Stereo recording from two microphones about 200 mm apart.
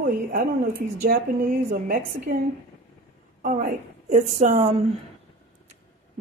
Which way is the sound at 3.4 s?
40° right (ahead or behind).